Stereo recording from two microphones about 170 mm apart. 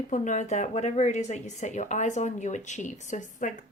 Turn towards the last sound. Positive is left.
turn(degrees=45)  # may be behind; listen again after turning